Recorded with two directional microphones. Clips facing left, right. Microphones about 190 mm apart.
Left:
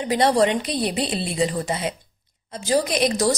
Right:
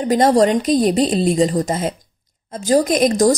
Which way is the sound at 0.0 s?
45° right (ahead or behind).